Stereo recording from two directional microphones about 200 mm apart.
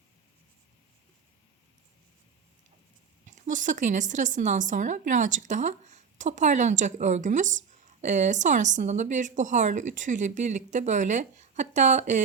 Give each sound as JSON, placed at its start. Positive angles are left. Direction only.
{"t": 3.2, "sound": "a woman's voice", "side_deg": -40}